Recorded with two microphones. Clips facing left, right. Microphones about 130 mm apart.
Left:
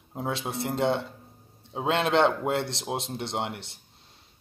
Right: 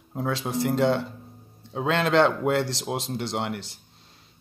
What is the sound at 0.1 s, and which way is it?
Speech, 25° left (ahead or behind).